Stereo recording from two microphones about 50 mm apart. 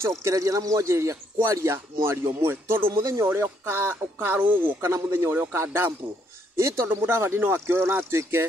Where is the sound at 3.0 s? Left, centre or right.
Right.